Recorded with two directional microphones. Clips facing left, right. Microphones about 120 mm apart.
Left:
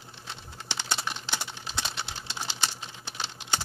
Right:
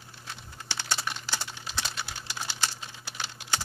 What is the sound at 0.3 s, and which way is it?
Bird, 20° left (ahead or behind).